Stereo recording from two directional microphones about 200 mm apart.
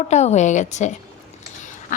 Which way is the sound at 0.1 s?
35° left (ahead or behind).